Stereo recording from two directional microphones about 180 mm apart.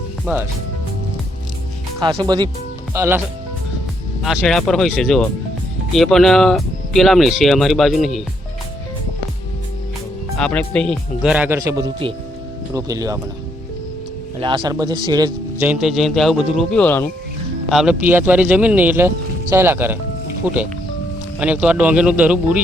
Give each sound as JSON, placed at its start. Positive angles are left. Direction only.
{"t": 0.3, "sound": "speech", "side_deg": -10}
{"t": 2.0, "sound": "speech", "side_deg": -25}
{"t": 4.2, "sound": "speech", "side_deg": 0}
{"t": 10.3, "sound": "speech", "side_deg": 5}
{"t": 14.3, "sound": "speech", "side_deg": -25}
{"t": 15.6, "sound": "speech", "side_deg": -5}
{"t": 17.7, "sound": "speech", "side_deg": -5}